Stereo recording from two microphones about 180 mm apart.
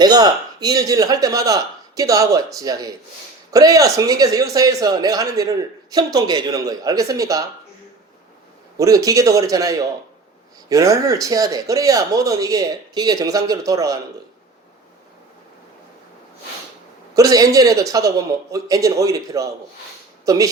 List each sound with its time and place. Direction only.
0.0 s speech: 20° right (ahead or behind)
8.8 s speech: 20° right (ahead or behind)
17.2 s speech: 20° right (ahead or behind)